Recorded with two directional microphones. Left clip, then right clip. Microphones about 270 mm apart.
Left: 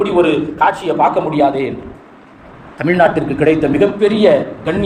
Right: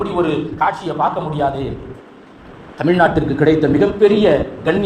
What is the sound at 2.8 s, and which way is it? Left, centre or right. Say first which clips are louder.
A man's voice: left 2 dB; right.